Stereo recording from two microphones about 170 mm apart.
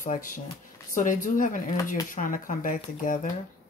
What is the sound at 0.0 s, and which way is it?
Speech, 50° left (ahead or behind).